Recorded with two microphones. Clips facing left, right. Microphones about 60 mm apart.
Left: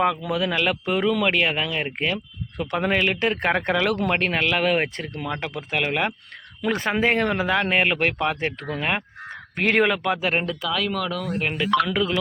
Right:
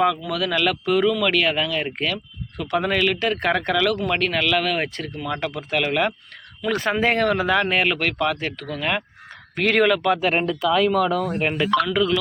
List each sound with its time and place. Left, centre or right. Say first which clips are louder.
0.3 s speech: right 1 dB; left
5.2 s speech: right 3 dB; centre
10.2 s speech: right 3 dB; centre
10.7 s speech: right 9 dB; centre
11.9 s speech: right 3 dB; left